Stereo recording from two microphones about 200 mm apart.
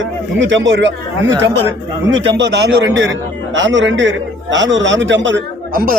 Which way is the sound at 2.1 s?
65° right (ahead or behind).